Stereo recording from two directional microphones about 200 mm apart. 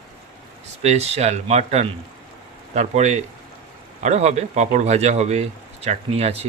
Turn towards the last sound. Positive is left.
turn(degrees=-30)  # may be behind; listen again after turning